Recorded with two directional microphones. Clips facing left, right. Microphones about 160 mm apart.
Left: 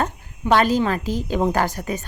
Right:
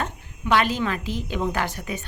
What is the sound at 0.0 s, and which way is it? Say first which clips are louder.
A woman's voice: left 5 dB; 40° left (ahead or behind).